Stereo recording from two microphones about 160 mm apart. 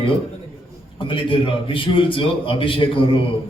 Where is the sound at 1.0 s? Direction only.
30° left (ahead or behind).